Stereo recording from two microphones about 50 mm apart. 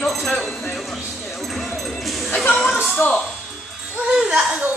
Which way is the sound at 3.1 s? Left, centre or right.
Centre.